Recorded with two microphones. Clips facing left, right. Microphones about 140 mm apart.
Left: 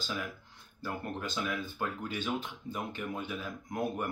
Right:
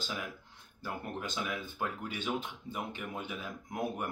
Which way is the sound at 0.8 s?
15° right (ahead or behind).